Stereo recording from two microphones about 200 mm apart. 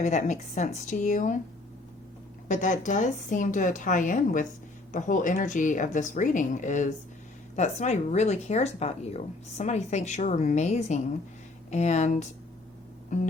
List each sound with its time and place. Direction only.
0.0 s speech: 35° left (ahead or behind)
2.5 s speech: 40° left (ahead or behind)